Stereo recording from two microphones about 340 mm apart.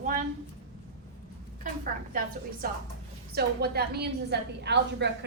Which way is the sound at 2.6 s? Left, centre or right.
Right.